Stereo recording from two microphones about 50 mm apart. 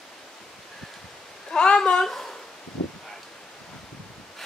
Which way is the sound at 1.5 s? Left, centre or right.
Centre.